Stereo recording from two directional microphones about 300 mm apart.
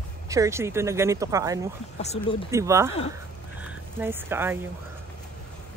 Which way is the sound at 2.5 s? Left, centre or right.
Centre.